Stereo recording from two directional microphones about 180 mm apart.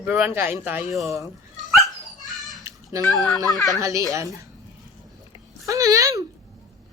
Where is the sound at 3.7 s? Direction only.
15° right (ahead or behind).